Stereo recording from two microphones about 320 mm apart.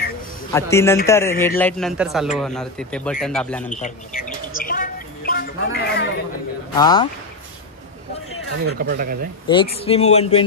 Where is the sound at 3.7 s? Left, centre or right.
Left.